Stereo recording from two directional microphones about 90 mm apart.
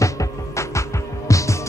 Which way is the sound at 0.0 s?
35° left (ahead or behind).